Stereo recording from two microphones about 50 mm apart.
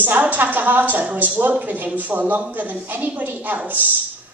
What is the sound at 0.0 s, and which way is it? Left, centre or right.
A woman's voice, right.